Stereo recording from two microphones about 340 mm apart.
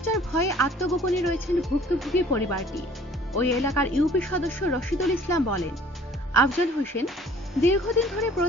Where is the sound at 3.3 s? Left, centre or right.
Centre.